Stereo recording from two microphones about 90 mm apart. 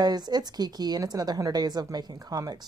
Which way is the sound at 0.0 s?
50° right (ahead or behind).